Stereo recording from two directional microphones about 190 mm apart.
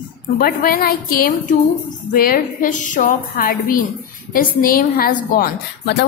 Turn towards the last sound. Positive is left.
turn(degrees=60)  # may be behind; listen again after turning